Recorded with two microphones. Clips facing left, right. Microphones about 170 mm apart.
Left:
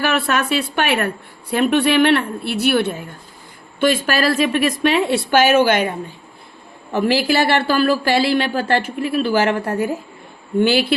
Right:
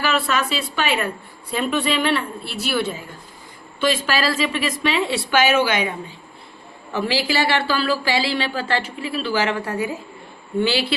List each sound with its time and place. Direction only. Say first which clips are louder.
0.0 s a woman's voice: left 2 dB; 60° left (ahead or behind)
6.9 s speech: left 5 dB; 55° left (ahead or behind)